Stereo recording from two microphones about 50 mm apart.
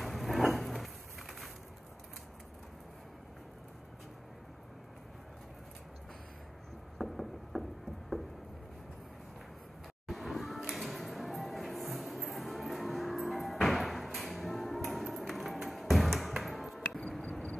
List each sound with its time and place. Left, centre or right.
0.0 s a sound: centre
7.0 s mechanisms: centre
10.0 s music: centre
17.2 s vehicle: left